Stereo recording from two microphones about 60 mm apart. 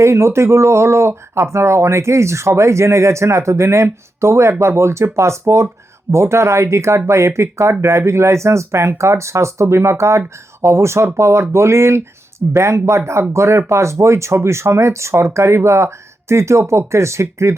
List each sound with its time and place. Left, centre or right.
0.0 s speech: right